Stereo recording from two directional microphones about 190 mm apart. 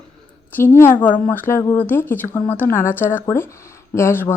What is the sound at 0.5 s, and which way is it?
Speech, 10° left (ahead or behind).